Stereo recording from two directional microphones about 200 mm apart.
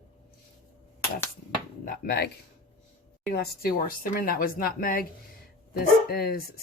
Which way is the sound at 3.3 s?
50° left (ahead or behind).